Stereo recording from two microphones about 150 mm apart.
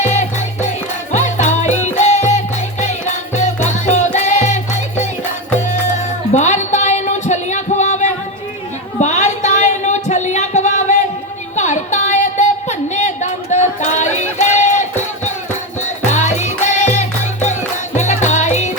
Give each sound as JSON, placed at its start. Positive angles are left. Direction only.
{"t": 0.1, "sound": "music", "side_deg": 50}
{"t": 6.3, "sound": "music", "side_deg": 50}
{"t": 9.0, "sound": "a sound", "side_deg": 50}
{"t": 16.0, "sound": "music", "side_deg": 50}